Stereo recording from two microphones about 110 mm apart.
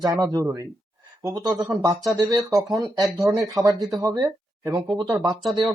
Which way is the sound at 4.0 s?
35° right (ahead or behind).